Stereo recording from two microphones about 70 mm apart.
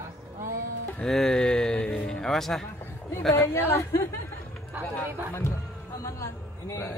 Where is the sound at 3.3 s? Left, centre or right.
Left.